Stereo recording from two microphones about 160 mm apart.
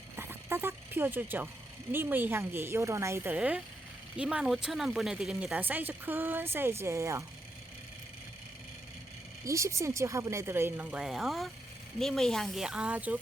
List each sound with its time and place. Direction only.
0.2 s a woman's voice: 15° right (ahead or behind)
9.4 s a woman's voice: 20° right (ahead or behind)